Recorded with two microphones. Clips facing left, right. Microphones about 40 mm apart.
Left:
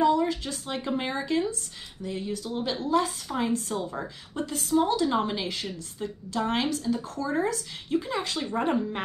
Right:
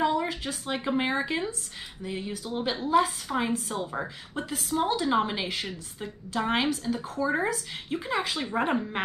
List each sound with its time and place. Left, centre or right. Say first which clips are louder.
0.0 s a woman's voice: left 3 dB; centre